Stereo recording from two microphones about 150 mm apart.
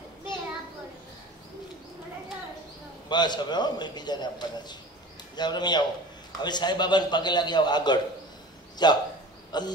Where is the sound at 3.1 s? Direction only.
30° left (ahead or behind).